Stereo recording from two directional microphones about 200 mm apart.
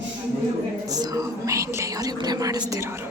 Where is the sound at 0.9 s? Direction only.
15° right (ahead or behind).